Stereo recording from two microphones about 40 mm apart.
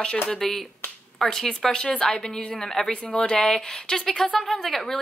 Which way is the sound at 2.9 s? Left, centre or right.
Left.